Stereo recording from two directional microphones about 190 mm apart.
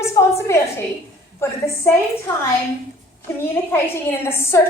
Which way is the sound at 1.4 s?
10° left (ahead or behind).